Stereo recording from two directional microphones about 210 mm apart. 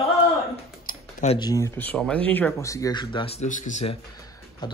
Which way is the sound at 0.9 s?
35° left (ahead or behind).